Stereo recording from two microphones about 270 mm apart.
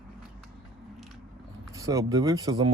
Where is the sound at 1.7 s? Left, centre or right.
Centre.